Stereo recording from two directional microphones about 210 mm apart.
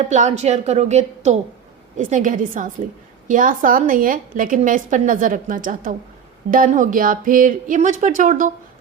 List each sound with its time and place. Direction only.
0.0 s a woman's voice: 35° right (ahead or behind)